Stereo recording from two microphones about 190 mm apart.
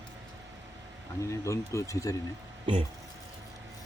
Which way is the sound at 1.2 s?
15° left (ahead or behind).